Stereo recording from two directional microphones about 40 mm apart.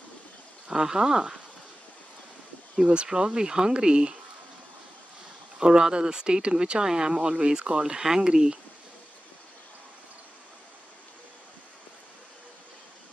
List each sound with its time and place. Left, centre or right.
0.7 s speech: centre
2.7 s speech: right
5.6 s speech: right